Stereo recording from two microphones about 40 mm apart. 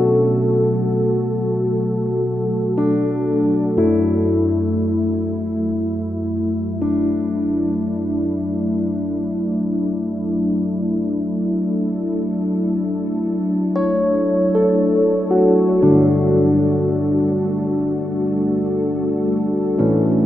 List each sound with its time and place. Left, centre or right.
2.8 s music: centre
3.7 s music: centre
14.0 s music: centre
15.9 s music: centre
16.3 s music: centre